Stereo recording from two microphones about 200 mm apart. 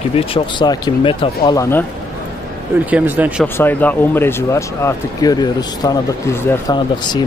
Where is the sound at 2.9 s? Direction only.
10° right (ahead or behind).